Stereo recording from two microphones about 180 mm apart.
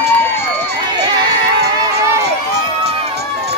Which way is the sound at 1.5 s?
65° right (ahead or behind).